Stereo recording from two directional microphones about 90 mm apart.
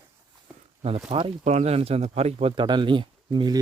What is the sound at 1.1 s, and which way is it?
Speech, 90° right.